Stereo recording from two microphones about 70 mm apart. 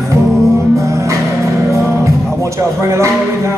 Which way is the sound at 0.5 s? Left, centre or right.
Right.